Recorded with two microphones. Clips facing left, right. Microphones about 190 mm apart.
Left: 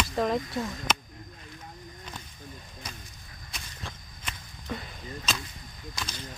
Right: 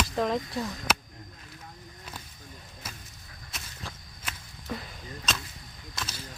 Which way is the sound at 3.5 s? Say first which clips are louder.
Even; centre (ahead or behind).